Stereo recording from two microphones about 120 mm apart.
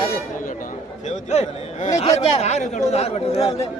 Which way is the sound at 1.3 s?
70° left (ahead or behind).